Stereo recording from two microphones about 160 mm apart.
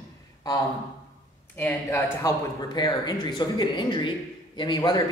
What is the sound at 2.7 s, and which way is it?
A man's voice, 25° left (ahead or behind).